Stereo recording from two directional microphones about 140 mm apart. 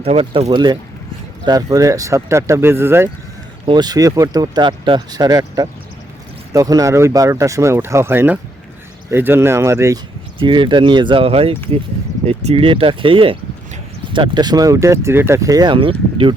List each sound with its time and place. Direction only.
0.0 s speech: 45° right (ahead or behind); by 3.1 s 15° right (ahead or behind)
3.7 s speech: 30° right (ahead or behind)
10.4 s speech: 35° right (ahead or behind)